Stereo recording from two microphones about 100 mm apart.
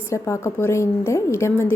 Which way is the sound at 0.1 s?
30° left (ahead or behind).